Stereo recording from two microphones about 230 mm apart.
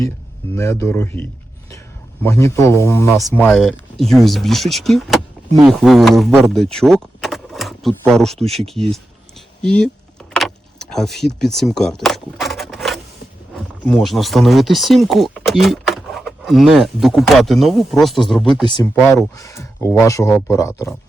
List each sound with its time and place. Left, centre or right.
0.5 s speech: centre
2.2 s speech: centre
3.5 s speech: centre
10.3 s vehicle: centre
13.8 s speech: centre
18.6 s speech: centre